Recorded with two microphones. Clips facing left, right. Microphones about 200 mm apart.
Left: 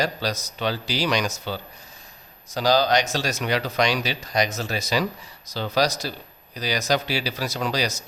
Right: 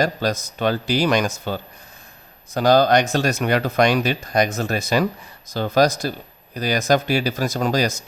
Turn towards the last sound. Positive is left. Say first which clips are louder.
# right 5 dB
turn(degrees=-50)  # may be behind; listen again after turning